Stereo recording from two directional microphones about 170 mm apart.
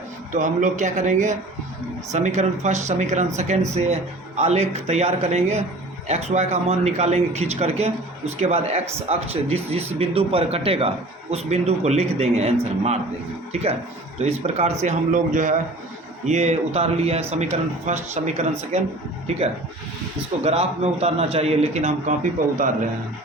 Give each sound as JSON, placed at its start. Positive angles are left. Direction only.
{"t": 0.3, "sound": "speech", "side_deg": -45}
{"t": 20.4, "sound": "speech", "side_deg": -35}